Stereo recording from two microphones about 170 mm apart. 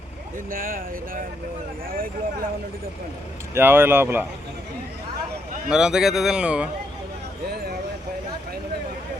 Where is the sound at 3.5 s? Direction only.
15° right (ahead or behind).